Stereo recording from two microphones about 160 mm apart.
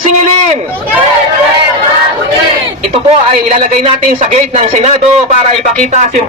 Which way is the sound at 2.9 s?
40° right (ahead or behind).